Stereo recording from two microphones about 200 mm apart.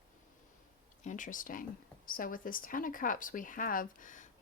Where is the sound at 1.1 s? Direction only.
40° left (ahead or behind).